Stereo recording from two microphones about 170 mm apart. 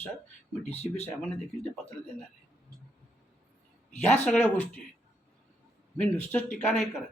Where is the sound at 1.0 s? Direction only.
5° left (ahead or behind).